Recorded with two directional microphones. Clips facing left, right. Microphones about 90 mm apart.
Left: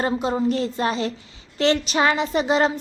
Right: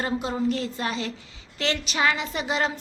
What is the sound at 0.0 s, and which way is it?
A woman's voice, 30° left (ahead or behind).